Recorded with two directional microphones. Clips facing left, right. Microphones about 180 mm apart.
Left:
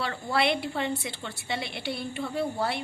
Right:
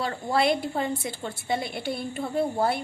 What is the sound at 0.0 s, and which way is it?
A woman's voice, 40° right (ahead or behind).